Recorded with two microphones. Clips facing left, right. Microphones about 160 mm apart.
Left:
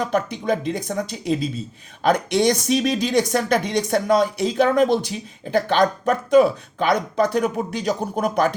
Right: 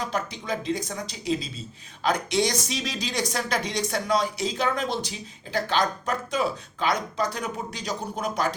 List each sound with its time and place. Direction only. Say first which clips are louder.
0.0 s speech: left 8 dB; 55° left (ahead or behind)